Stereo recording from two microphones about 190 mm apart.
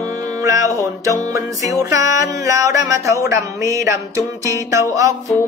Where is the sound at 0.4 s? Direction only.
15° right (ahead or behind).